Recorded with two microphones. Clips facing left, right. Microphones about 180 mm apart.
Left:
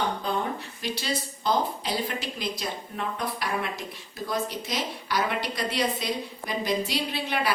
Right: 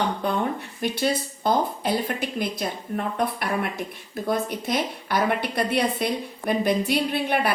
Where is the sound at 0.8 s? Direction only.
55° right (ahead or behind).